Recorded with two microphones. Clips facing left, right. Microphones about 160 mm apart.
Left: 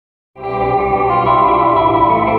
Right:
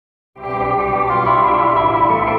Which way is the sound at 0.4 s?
25° left (ahead or behind).